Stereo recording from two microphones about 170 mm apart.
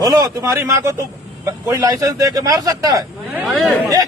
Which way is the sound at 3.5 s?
Centre (ahead or behind).